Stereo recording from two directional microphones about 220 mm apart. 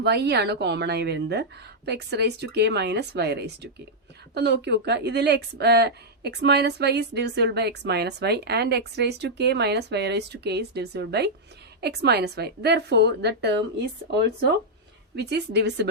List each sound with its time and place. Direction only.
0.0 s speech: 50° right (ahead or behind)